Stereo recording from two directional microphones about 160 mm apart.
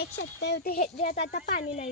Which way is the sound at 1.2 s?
85° left.